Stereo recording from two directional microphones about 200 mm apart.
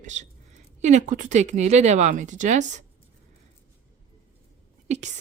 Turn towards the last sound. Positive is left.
turn(degrees=-35)  # may be behind; listen again after turning